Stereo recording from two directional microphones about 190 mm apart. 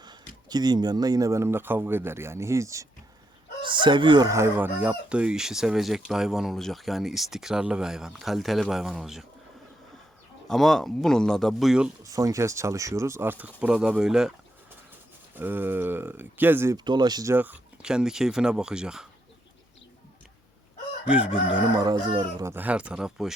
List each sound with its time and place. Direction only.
0.0 s speech: 20° right (ahead or behind); by 9.2 s centre (ahead or behind)
10.5 s speech: centre (ahead or behind)
12.1 s speech: 15° right (ahead or behind)
15.4 s speech: 10° right (ahead or behind)
21.1 s speech: 5° right (ahead or behind)
21.8 s speech: 20° right (ahead or behind); by 23.3 s centre (ahead or behind)